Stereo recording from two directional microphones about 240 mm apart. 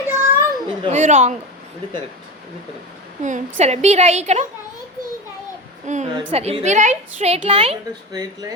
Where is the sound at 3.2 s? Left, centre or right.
Right.